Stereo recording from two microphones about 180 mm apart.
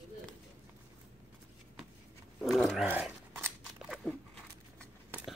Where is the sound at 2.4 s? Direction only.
Centre (ahead or behind).